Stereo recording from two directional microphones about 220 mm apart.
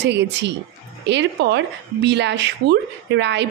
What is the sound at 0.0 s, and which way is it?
Speech, 50° right (ahead or behind).